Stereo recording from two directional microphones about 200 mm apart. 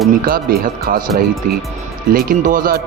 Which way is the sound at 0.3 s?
45° right (ahead or behind).